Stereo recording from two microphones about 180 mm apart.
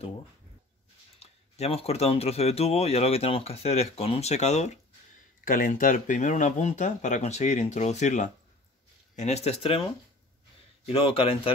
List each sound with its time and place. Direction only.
1.2 s speech: 35° left (ahead or behind)
5.4 s speech: 50° left (ahead or behind); by 9.8 s 30° left (ahead or behind)
10.9 s speech: 30° left (ahead or behind)